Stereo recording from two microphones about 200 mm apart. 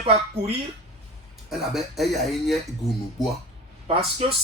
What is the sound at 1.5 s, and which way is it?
Speech, centre (ahead or behind).